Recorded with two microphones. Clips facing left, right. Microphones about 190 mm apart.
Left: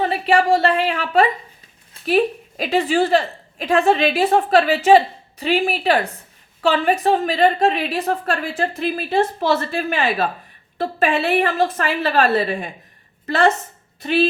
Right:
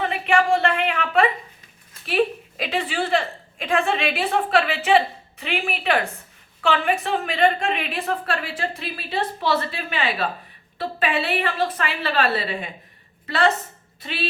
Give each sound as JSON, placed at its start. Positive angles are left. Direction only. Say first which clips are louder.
{"t": 0.0, "sound": "a woman's voice", "louder": "left 3 dB", "side_deg": 35}